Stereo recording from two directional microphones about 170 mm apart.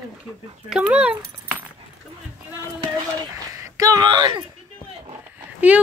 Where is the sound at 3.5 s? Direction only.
20° right (ahead or behind).